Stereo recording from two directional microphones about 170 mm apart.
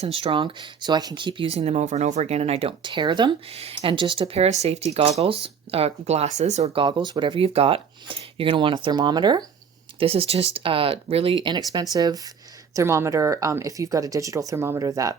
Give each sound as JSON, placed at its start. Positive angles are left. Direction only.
{"t": 0.0, "sound": "speech", "side_deg": -35}
{"t": 6.8, "sound": "speech", "side_deg": -25}